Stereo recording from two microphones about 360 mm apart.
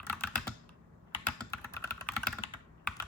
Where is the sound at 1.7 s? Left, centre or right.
Centre.